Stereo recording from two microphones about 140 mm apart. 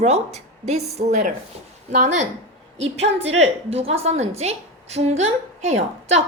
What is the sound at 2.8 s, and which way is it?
A woman's voice, 50° right (ahead or behind).